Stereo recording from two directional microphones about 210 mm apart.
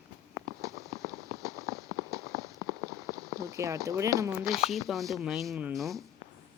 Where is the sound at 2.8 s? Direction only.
15° right (ahead or behind).